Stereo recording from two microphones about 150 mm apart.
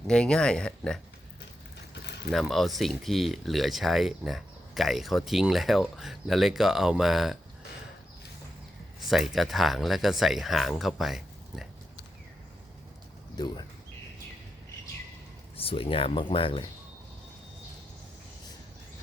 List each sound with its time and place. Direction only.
0.1 s speech: 5° left (ahead or behind)
2.3 s speech: centre (ahead or behind)
9.0 s speech: centre (ahead or behind)
13.3 s speech: 30° left (ahead or behind)
15.5 s speech: 40° left (ahead or behind)